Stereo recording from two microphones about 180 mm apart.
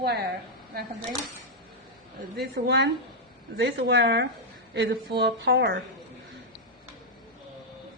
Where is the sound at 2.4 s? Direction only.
70° right (ahead or behind).